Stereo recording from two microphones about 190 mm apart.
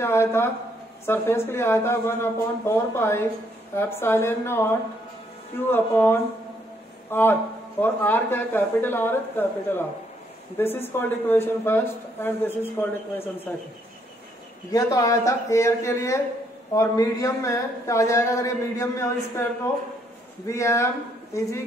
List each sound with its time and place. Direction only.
0.0 s speech: 15° left (ahead or behind)
14.7 s speech: 20° left (ahead or behind)
20.4 s speech: 15° left (ahead or behind)